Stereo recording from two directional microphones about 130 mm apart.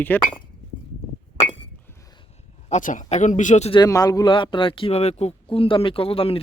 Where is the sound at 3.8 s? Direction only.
25° left (ahead or behind); by 5.4 s 55° left (ahead or behind).